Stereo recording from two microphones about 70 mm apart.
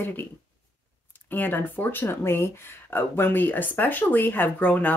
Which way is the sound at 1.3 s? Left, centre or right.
Left.